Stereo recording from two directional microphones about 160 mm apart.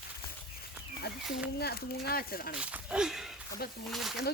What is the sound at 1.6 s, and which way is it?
Speech, 80° left.